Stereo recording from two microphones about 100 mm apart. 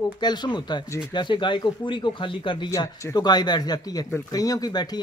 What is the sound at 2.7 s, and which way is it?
Speech, 35° left (ahead or behind).